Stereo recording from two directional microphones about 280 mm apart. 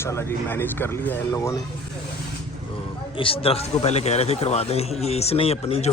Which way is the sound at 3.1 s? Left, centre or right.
Centre.